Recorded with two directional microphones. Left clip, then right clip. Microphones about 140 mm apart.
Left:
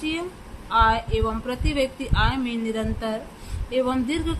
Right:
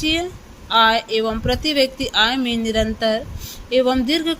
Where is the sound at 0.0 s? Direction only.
40° right (ahead or behind).